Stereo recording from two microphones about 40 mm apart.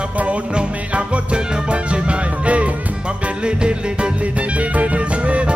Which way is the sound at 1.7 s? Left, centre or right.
Right.